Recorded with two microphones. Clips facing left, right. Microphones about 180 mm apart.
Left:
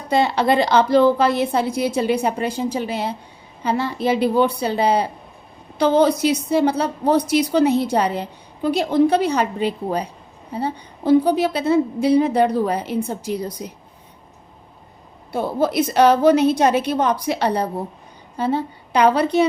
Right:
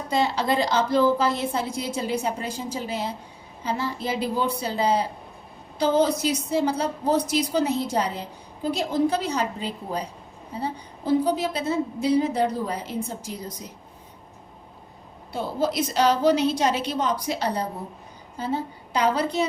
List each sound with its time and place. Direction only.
0.1 s a woman's voice: 65° left (ahead or behind)
15.3 s a woman's voice: 55° left (ahead or behind)